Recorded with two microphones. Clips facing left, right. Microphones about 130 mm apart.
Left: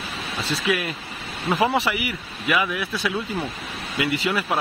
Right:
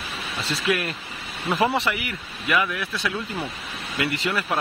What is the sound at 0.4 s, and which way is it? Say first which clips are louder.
Speech: left 1 dB; centre (ahead or behind).